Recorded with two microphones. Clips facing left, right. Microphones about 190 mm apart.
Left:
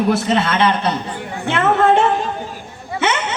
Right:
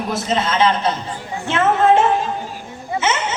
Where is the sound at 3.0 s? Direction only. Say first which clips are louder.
Left 2 dB; 65° left (ahead or behind).